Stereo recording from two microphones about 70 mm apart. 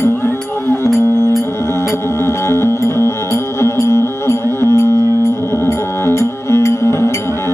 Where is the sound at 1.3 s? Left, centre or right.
Left.